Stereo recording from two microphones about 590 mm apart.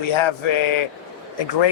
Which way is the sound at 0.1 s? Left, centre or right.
Left.